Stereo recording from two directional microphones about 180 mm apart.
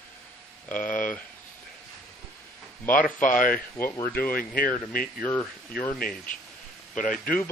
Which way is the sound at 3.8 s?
15° left (ahead or behind).